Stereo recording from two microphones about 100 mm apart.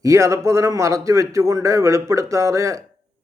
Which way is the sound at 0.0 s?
30° right (ahead or behind).